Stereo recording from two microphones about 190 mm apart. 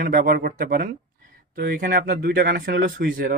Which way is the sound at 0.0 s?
45° right (ahead or behind).